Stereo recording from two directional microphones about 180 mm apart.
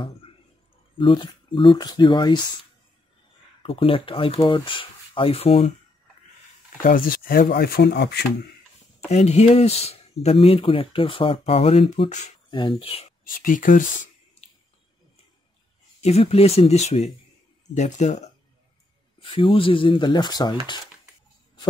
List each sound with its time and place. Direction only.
0.9 s speech: 25° left (ahead or behind)
3.6 s speech: 30° left (ahead or behind)
7.1 s speech: 55° left (ahead or behind); by 8.2 s 70° left (ahead or behind)
9.1 s speech: 40° left (ahead or behind)
12.4 s speech: 25° left (ahead or behind)
13.4 s speech: 50° left (ahead or behind)
16.0 s speech: 35° left (ahead or behind)